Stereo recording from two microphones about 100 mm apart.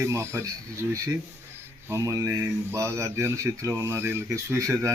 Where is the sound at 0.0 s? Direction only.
30° right (ahead or behind).